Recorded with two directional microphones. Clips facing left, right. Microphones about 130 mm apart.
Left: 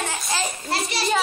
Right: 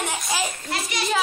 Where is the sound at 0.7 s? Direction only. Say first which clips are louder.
Left 3 dB; 30° left (ahead or behind).